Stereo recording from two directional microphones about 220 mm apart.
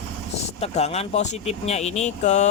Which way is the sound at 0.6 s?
30° left (ahead or behind).